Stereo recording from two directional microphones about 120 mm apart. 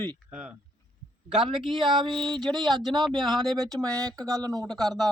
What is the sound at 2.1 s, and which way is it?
Speech, 5° left (ahead or behind).